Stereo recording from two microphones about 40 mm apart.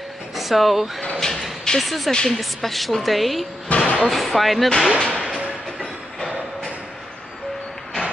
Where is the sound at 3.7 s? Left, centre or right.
Left.